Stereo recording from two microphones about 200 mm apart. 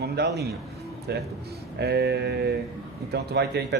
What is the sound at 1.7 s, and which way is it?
Speech, 55° right (ahead or behind).